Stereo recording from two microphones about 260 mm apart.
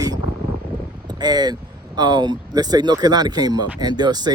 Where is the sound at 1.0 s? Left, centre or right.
Centre.